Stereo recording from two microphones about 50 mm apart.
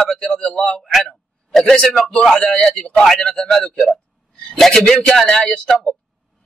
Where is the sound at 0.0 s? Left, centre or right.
Centre.